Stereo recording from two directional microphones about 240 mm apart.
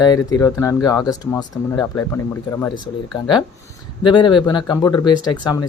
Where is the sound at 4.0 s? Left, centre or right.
Centre.